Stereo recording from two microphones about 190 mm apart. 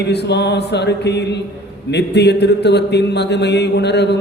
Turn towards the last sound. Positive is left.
turn(degrees=60)  # may be behind; listen again after turning